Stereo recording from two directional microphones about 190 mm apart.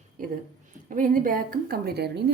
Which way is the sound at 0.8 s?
45° right (ahead or behind).